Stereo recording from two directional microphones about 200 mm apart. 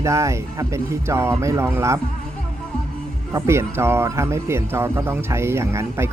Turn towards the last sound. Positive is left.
turn(degrees=-15)  # may be behind; listen again after turning